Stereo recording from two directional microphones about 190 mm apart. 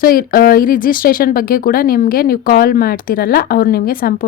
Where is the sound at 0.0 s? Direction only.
50° left (ahead or behind).